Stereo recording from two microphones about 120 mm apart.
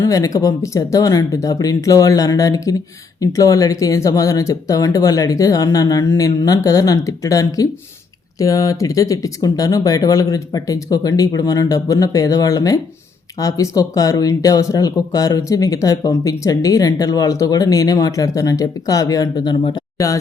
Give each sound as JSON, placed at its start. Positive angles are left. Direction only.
{"t": 0.0, "sound": "speech", "side_deg": 30}